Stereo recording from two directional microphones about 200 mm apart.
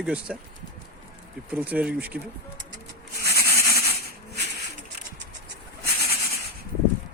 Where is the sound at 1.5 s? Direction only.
10° right (ahead or behind).